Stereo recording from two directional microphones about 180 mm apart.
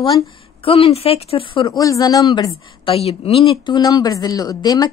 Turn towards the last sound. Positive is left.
turn(degrees=20)  # may be behind; listen again after turning